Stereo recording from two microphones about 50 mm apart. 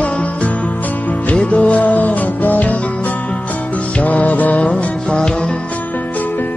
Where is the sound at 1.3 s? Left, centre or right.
Left.